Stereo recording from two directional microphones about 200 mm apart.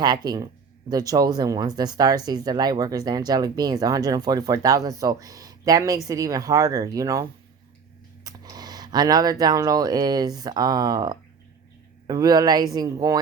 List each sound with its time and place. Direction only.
0.0 s a woman's voice: 20° right (ahead or behind)